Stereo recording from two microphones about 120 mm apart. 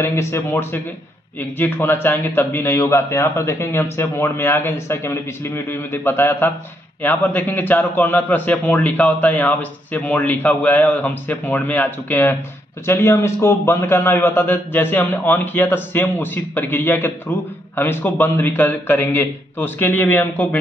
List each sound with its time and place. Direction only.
0.0 s a man's voice: 20° left (ahead or behind)